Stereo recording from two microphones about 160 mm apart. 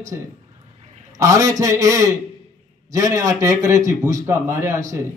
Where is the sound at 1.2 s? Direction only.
20° right (ahead or behind).